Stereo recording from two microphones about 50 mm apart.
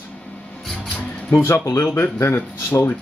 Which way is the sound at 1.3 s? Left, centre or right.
Left.